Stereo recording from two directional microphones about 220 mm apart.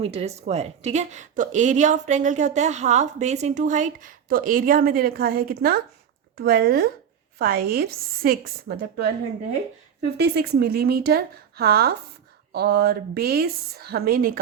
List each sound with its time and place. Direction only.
0.0 s a woman's voice: 25° right (ahead or behind); by 9.0 s 45° right (ahead or behind)
10.2 s a woman's voice: 45° right (ahead or behind)